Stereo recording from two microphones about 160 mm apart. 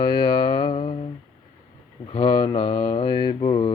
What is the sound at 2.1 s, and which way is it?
Mantra, 35° left (ahead or behind).